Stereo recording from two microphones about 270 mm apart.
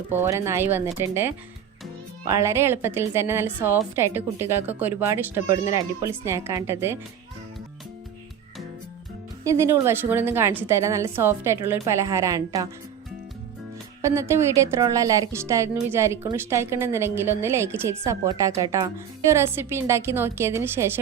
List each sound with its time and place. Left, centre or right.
0.1 s a woman's voice: centre
9.4 s a woman's voice: centre
14.0 s a woman's voice: centre